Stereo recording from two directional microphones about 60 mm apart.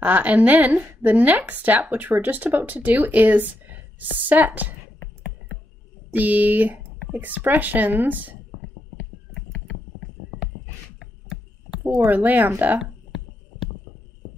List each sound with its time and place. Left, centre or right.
0.0 s a woman's voice: right
6.1 s speech: right
11.0 s chopping: centre
12.1 s speech: right